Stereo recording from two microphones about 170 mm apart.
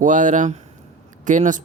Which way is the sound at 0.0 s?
50° right (ahead or behind).